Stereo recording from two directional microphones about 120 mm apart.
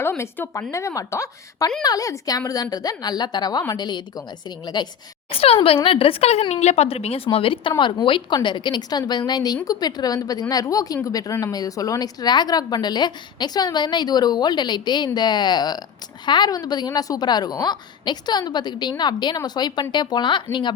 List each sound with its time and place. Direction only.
0.2 s a woman's voice: 20° left (ahead or behind)
5.3 s a woman's voice: 50° left (ahead or behind)